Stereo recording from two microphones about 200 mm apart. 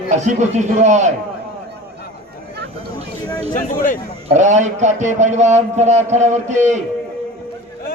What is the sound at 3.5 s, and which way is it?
Speech, 40° left (ahead or behind).